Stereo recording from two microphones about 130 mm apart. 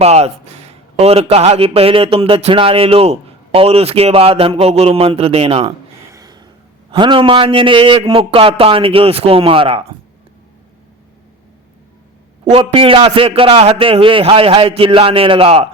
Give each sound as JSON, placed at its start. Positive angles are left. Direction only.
{"t": 0.0, "sound": "a man's voice", "side_deg": -55}
{"t": 6.1, "sound": "gasp", "side_deg": -30}
{"t": 6.9, "sound": "a man's voice", "side_deg": -40}
{"t": 12.5, "sound": "a man's voice", "side_deg": -45}